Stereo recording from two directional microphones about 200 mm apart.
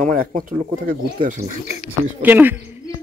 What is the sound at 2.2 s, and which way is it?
Speech, 10° right (ahead or behind).